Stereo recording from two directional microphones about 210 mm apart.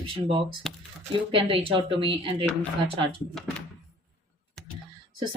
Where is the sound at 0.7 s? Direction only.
Centre (ahead or behind).